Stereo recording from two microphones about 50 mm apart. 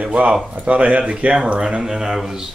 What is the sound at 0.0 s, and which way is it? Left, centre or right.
Speech, right.